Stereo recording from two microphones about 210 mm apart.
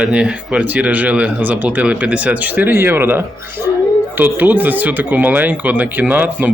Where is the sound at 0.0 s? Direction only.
5° right (ahead or behind).